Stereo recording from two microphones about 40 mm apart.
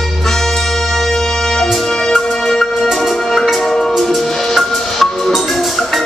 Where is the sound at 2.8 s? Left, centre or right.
Centre.